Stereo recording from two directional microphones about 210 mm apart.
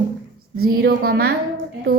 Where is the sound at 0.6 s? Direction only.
45° right (ahead or behind).